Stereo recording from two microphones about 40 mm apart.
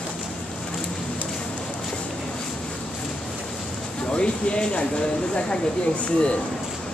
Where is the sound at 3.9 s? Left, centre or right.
Left.